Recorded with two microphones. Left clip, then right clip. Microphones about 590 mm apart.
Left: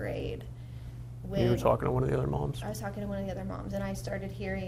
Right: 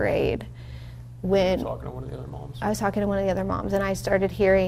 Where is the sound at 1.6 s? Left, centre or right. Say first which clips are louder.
Left 6 dB; left.